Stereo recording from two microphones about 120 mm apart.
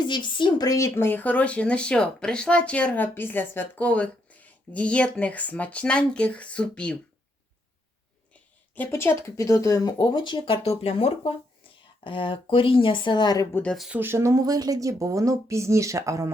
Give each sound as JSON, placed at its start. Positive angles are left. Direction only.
{"t": 0.0, "sound": "speech", "side_deg": 40}
{"t": 8.7, "sound": "speech", "side_deg": 15}
{"t": 12.0, "sound": "speech", "side_deg": 45}
{"t": 13.5, "sound": "speech", "side_deg": 10}
{"t": 13.7, "sound": "speech", "side_deg": -5}
{"t": 14.0, "sound": "speech", "side_deg": -20}